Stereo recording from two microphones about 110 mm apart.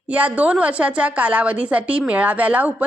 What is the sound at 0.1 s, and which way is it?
A woman's voice, 15° right (ahead or behind).